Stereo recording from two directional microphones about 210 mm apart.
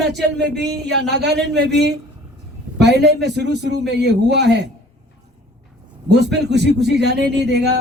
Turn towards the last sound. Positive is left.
turn(degrees=-55)  # may be behind; listen again after turning